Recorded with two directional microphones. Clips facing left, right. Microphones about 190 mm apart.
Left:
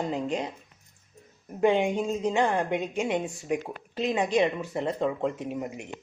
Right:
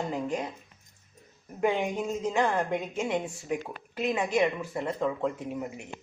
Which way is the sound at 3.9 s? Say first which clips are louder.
Left 2 dB; 30° left (ahead or behind).